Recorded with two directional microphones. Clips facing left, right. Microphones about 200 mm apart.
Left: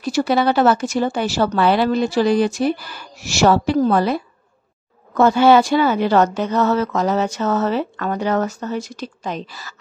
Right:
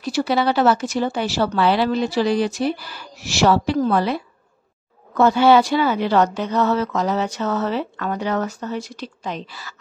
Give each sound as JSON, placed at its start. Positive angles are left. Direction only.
{"t": 0.0, "sound": "a woman's voice", "side_deg": 50}